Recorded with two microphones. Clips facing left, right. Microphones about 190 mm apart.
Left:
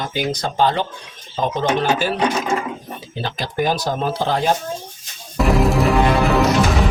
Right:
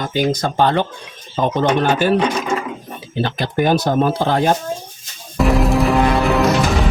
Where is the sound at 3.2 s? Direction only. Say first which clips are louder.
Right 3 dB; 55° right (ahead or behind).